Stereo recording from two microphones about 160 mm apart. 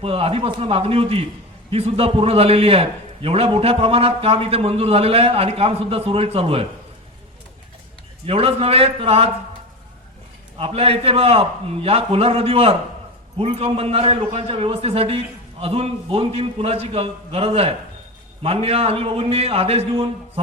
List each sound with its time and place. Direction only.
0.0 s a man's voice: 35° right (ahead or behind)
8.3 s a man's voice: 35° right (ahead or behind)
10.6 s a man's voice: 35° right (ahead or behind)